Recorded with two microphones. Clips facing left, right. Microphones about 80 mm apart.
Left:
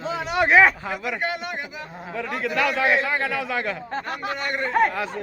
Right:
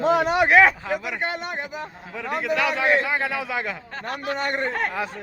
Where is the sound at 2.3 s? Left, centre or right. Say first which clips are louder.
Right 1 dB; centre.